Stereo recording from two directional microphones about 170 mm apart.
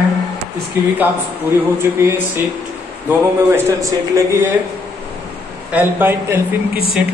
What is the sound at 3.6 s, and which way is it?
Speech, 20° right (ahead or behind).